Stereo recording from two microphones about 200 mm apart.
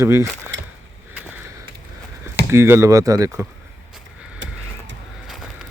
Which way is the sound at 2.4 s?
10° right (ahead or behind).